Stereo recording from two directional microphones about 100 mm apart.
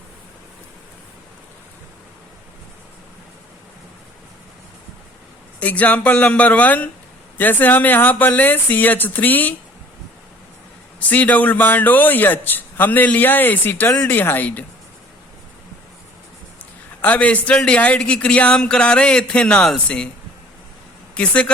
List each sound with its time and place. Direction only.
5.5 s a man's voice: 15° left (ahead or behind)
11.1 s a man's voice: 15° left (ahead or behind)
17.0 s a man's voice: 15° left (ahead or behind)
21.2 s a man's voice: 10° left (ahead or behind)